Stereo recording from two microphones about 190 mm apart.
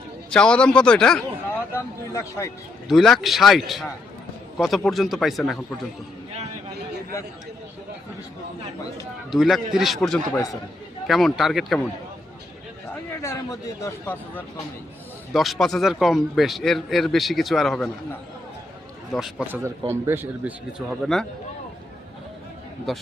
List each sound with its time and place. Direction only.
0.3 s speech: 5° left (ahead or behind)
2.9 s a man's voice: centre (ahead or behind)
9.3 s a man's voice: centre (ahead or behind)
10.3 s a man's voice: 20° left (ahead or behind)
11.0 s a man's voice: centre (ahead or behind)
12.9 s speech: 15° left (ahead or behind)
15.3 s a man's voice: centre (ahead or behind)
19.1 s a man's voice: 5° right (ahead or behind)
22.9 s a man's voice: centre (ahead or behind)